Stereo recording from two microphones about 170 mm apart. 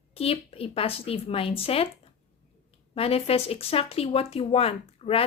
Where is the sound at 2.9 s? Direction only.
35° left (ahead or behind).